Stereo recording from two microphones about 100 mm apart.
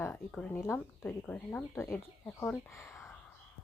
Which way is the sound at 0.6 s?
25° left (ahead or behind).